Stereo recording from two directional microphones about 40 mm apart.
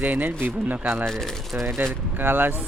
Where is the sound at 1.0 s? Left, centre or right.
Centre.